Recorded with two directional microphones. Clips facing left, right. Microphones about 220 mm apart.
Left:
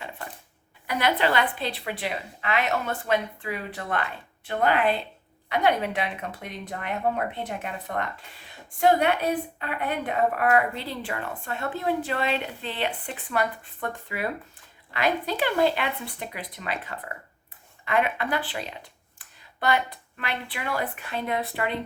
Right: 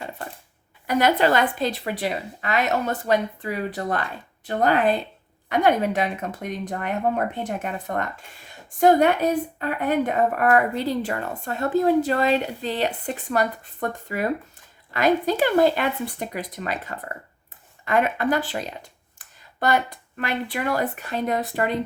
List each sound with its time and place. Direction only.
0.9 s a woman's voice: 45° right (ahead or behind)